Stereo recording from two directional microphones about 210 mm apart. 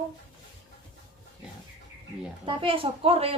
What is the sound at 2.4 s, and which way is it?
Speech, 25° right (ahead or behind).